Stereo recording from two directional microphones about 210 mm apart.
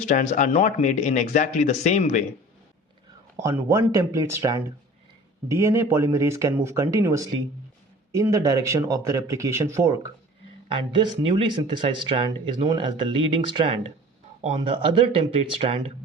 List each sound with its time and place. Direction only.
0.0 s speech: 35° left (ahead or behind)
3.4 s speech: 10° right (ahead or behind)